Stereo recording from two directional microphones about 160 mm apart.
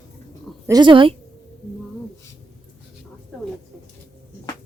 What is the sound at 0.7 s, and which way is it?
Speech, 30° right (ahead or behind).